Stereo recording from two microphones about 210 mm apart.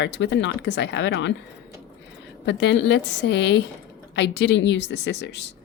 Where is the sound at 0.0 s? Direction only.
55° left (ahead or behind).